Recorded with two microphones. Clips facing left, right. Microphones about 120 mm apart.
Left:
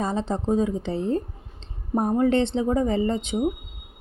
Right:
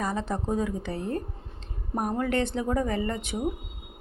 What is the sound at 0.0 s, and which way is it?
A woman's voice, 25° left (ahead or behind).